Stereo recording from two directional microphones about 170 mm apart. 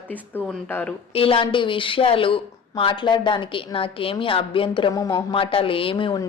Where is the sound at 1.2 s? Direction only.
30° left (ahead or behind).